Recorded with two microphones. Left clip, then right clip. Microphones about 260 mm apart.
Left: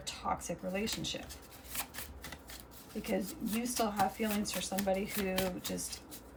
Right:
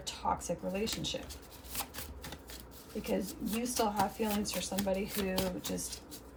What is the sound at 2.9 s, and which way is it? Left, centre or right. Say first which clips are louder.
Speech: right 1 dB; centre.